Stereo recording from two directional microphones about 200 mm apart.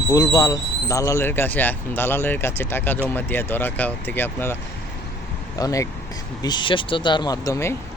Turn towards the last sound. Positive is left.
turn(degrees=15)  # may be behind; listen again after turning